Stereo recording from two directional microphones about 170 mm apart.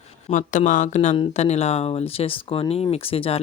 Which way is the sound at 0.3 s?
50° left (ahead or behind).